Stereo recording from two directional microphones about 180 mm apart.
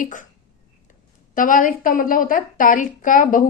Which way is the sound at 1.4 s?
45° left (ahead or behind).